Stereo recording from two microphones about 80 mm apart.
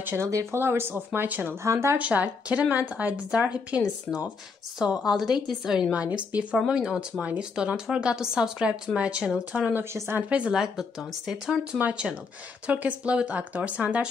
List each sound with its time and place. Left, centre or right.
0.0 s speech: right
0.3 s speech: right
1.6 s speech: right
2.0 s a woman's voice: centre
4.7 s a woman's voice: centre
9.9 s speech: right
10.3 s a woman's voice: centre